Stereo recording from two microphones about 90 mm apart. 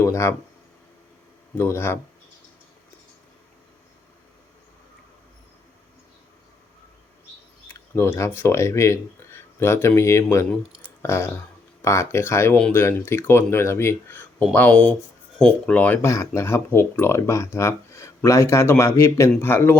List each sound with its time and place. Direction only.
0.0 s a sound: 30° left (ahead or behind)
1.5 s speech: 25° left (ahead or behind)
7.7 s speech: 25° left (ahead or behind)
16.0 s speech: 35° left (ahead or behind)